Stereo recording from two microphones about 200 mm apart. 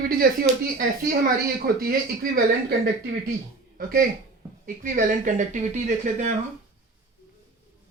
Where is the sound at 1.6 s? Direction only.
45° right (ahead or behind).